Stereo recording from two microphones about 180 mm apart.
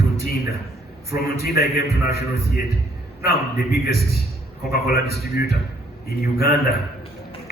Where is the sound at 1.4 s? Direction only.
60° left (ahead or behind).